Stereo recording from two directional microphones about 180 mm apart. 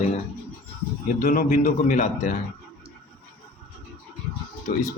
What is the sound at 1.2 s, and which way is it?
Speech, 50° left (ahead or behind).